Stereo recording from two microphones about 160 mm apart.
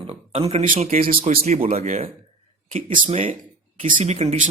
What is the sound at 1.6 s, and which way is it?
Speech, 45° right (ahead or behind).